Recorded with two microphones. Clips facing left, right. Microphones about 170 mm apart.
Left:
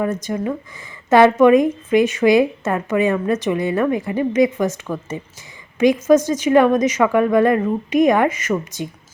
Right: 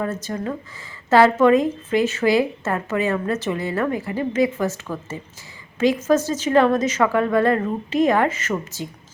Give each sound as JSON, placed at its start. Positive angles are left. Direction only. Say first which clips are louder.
{"t": 0.0, "sound": "a woman's voice", "louder": "left 4 dB", "side_deg": 15}
{"t": 6.1, "sound": "a woman's voice", "louder": "left 5 dB", "side_deg": 15}